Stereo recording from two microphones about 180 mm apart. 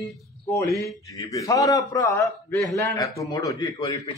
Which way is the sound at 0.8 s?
20° left (ahead or behind).